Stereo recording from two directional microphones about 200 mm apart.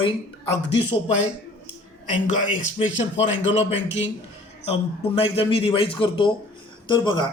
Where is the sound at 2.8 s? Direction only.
70° left (ahead or behind).